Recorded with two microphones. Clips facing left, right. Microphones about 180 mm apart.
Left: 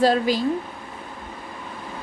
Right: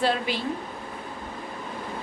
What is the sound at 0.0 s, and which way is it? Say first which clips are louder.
Speech: left 7 dB; 40° left (ahead or behind).